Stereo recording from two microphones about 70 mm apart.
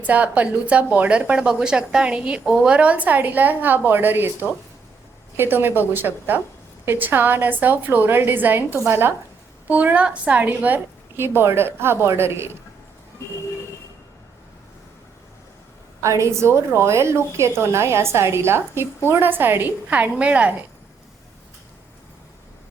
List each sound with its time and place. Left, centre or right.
0.0 s a woman's voice: right
5.4 s a woman's voice: right
9.6 s a woman's voice: right
11.2 s a woman's voice: right
16.0 s a woman's voice: right